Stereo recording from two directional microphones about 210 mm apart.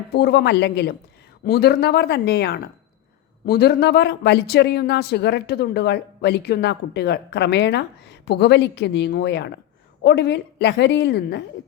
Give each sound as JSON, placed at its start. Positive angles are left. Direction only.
{"t": 0.1, "sound": "speech", "side_deg": 50}